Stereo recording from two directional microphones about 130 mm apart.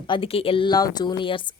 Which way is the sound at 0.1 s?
45° left (ahead or behind).